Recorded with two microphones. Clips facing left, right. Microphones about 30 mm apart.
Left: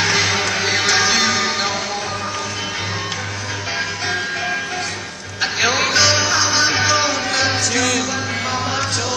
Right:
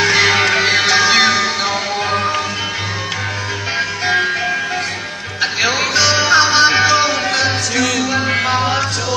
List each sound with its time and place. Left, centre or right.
0.2 s music: right
5.4 s music: centre
6.2 s music: right
6.8 s music: centre
8.1 s music: right